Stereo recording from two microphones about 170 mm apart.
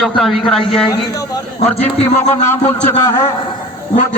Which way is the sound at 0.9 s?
20° left (ahead or behind).